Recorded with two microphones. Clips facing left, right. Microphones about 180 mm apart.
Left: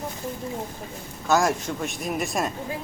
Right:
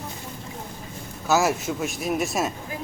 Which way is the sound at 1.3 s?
5° right (ahead or behind).